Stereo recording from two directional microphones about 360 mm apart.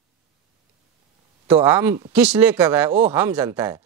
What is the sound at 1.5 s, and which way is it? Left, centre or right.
Speech, centre.